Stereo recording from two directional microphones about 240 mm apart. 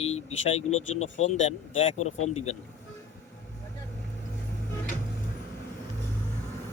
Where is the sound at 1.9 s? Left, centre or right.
Left.